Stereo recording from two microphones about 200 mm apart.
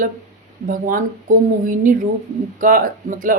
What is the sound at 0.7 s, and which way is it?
A woman's voice, 40° right (ahead or behind).